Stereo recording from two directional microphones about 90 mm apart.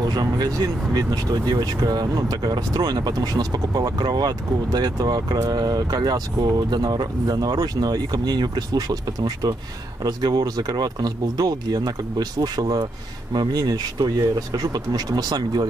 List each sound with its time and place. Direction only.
0.1 s speech: 50° right (ahead or behind)